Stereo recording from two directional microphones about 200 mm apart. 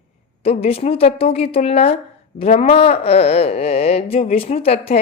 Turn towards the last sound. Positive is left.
turn(degrees=30)  # may be behind; listen again after turning